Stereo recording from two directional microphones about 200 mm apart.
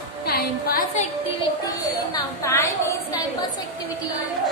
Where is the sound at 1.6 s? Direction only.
15° left (ahead or behind).